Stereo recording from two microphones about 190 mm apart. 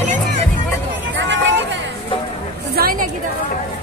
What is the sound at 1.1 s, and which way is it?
Hubbub, 65° right (ahead or behind).